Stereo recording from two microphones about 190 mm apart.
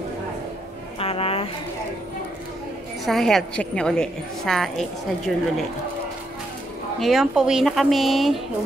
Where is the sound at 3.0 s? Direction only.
Centre (ahead or behind).